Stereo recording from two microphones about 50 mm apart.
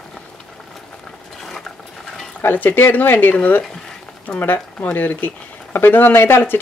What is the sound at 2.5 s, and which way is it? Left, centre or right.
Speech, left.